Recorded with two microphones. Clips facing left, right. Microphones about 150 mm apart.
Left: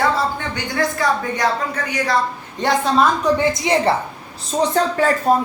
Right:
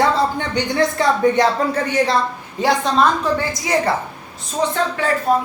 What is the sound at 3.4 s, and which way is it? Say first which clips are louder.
Speech: left 3 dB; 25° left (ahead or behind).